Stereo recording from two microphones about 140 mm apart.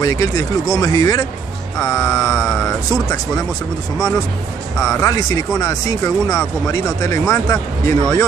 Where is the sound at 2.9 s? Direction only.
25° left (ahead or behind).